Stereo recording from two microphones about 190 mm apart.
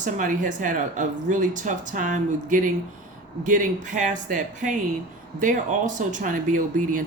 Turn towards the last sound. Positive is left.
turn(degrees=-45)  # may be behind; listen again after turning